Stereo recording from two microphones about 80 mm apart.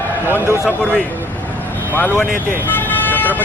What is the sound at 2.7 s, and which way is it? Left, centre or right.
Vehicle, left.